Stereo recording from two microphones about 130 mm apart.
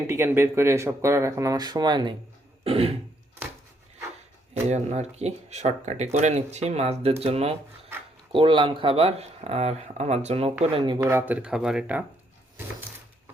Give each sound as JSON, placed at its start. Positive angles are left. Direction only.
{"t": 0.1, "sound": "speech", "side_deg": -20}
{"t": 2.6, "sound": "speech", "side_deg": -45}
{"t": 4.7, "sound": "speech", "side_deg": -60}
{"t": 10.9, "sound": "speech", "side_deg": -20}